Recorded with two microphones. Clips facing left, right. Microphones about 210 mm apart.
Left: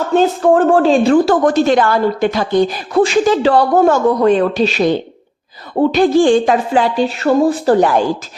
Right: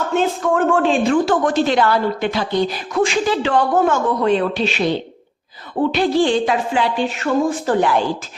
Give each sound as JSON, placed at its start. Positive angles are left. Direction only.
{"t": 0.1, "sound": "a woman's voice", "side_deg": 35}
{"t": 2.9, "sound": "a woman's voice", "side_deg": 35}